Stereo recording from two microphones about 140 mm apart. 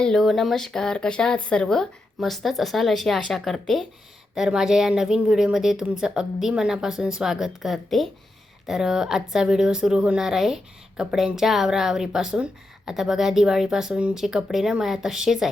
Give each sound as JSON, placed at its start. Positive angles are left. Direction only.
{"t": 0.0, "sound": "a woman's voice", "side_deg": 0}